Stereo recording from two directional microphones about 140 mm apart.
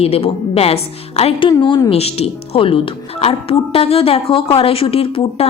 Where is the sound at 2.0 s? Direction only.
45° left (ahead or behind).